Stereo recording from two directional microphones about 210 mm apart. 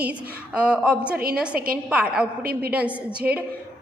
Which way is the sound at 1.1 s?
45° right (ahead or behind).